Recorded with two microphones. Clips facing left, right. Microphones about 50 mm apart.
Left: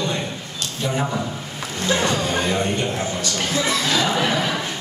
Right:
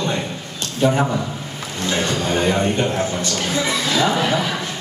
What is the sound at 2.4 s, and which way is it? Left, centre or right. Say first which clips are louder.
Speech: right 3 dB; centre.